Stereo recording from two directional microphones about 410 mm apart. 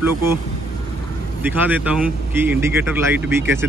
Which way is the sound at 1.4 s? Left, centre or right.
Centre.